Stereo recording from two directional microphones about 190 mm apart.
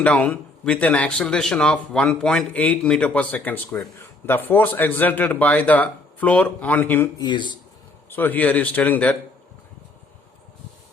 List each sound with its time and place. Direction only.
0.0 s speech: 5° left (ahead or behind)
7.2 s speech: 25° left (ahead or behind)
8.1 s speech: 10° left (ahead or behind)